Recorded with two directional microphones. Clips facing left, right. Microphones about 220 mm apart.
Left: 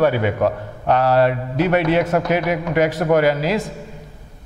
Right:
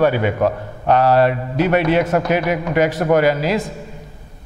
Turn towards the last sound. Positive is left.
turn(degrees=-15)  # may be behind; listen again after turning